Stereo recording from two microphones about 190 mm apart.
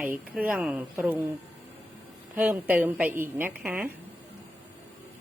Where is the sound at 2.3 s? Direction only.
10° right (ahead or behind).